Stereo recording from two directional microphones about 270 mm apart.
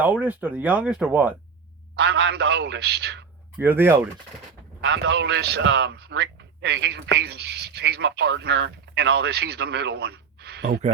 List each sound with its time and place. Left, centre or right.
0.0 s speech: centre
2.0 s a man's voice: right
3.6 s speech: centre
4.8 s a man's voice: right